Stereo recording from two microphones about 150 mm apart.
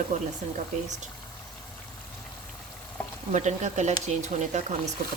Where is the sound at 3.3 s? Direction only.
50° right (ahead or behind).